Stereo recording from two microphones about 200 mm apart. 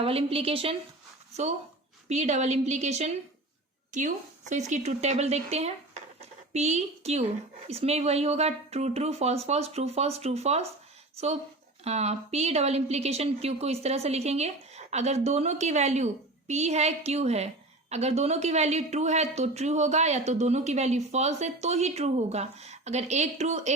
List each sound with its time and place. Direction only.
0.0 s a woman's voice: 30° right (ahead or behind)
2.0 s a woman's voice: 35° right (ahead or behind)
11.8 s a woman's voice: 30° right (ahead or behind)